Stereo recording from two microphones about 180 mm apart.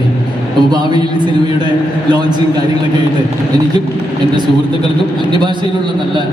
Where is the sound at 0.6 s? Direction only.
25° right (ahead or behind).